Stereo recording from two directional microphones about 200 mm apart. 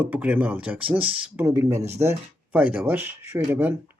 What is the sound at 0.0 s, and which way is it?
Speech, 5° right (ahead or behind).